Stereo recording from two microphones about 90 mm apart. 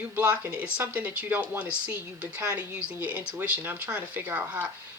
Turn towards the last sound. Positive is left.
turn(degrees=-20)  # may be behind; listen again after turning